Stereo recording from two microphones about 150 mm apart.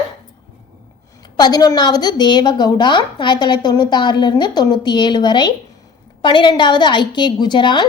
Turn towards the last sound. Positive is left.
turn(degrees=30)  # may be behind; listen again after turning